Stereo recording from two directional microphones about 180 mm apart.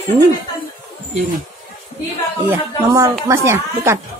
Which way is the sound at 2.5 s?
20° right (ahead or behind).